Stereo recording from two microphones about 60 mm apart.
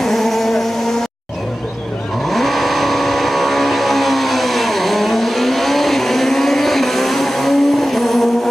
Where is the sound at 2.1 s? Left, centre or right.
Centre.